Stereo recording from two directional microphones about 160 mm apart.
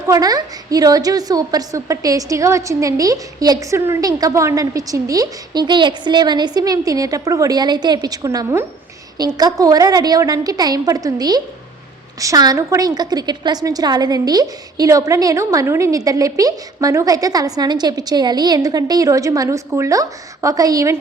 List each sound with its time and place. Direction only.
0.1 s a woman's voice: 25° right (ahead or behind)